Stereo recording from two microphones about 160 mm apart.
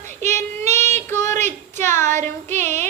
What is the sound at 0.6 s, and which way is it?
Child singing, 45° right (ahead or behind).